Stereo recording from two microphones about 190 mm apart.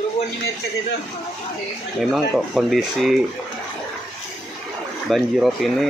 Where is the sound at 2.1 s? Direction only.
Centre (ahead or behind).